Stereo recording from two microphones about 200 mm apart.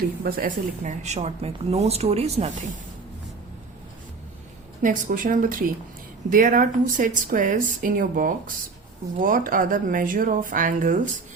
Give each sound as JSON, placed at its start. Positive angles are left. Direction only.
{"t": 0.2, "sound": "speech", "side_deg": -45}
{"t": 4.8, "sound": "speech", "side_deg": -40}